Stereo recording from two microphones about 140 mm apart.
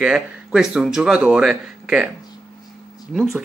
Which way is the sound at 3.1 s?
Centre (ahead or behind).